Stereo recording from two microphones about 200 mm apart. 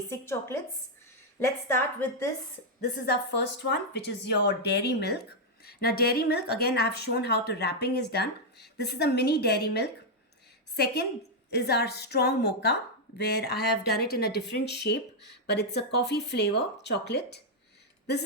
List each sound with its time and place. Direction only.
0.1 s speech: 15° left (ahead or behind)
1.6 s speech: 10° left (ahead or behind)
3.1 s speech: 60° left (ahead or behind)